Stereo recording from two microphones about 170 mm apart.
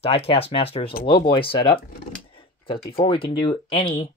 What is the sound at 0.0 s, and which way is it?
Speech, 35° left (ahead or behind).